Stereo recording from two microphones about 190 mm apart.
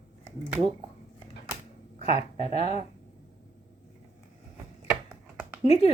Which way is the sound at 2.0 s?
30° left (ahead or behind).